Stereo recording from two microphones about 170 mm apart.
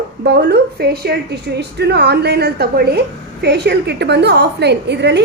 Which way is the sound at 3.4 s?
85° right.